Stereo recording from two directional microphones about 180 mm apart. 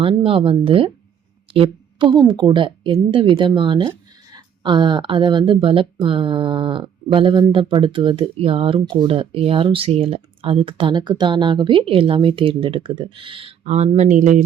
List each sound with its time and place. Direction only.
0.0 s speech: 30° right (ahead or behind)